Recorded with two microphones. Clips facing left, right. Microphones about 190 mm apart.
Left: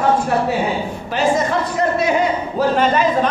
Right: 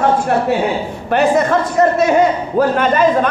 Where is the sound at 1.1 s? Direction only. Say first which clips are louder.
Right 5 dB; 60° right (ahead or behind).